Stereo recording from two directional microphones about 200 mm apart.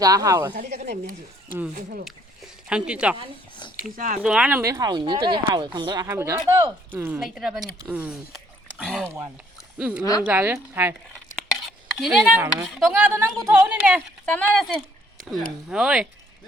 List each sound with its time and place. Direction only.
0.0 s speech: 15° right (ahead or behind)
0.5 s a woman's voice: 45° right (ahead or behind)
2.0 s a sound: 5° right (ahead or behind)
3.9 s speech: 40° right (ahead or behind)
4.2 s speech: 5° right (ahead or behind)
10.0 s speech: 20° left (ahead or behind)
10.2 s speech: 10° right (ahead or behind)
11.3 s a sound: centre (ahead or behind)
12.6 s a woman's voice: 5° right (ahead or behind)